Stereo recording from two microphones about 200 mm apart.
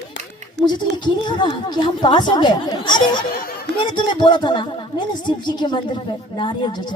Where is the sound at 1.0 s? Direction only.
20° left (ahead or behind).